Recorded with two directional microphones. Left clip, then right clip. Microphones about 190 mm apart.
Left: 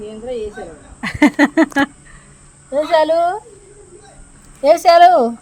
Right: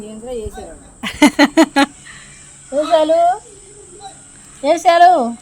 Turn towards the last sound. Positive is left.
turn(degrees=55)  # may be behind; listen again after turning